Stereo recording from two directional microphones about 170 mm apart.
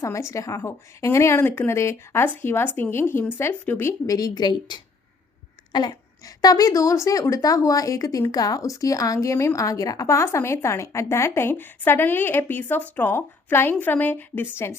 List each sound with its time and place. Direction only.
0.0 s a woman's voice: 15° left (ahead or behind)